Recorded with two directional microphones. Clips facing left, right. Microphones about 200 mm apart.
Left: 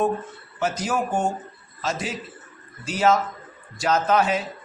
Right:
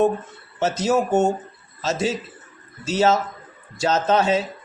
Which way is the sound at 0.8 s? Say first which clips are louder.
Right 8 dB; 25° right (ahead or behind).